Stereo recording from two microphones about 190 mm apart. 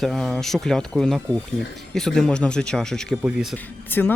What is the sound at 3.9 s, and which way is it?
Speech, 10° left (ahead or behind).